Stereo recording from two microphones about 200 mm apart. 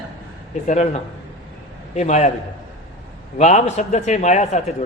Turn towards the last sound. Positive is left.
turn(degrees=35)  # may be behind; listen again after turning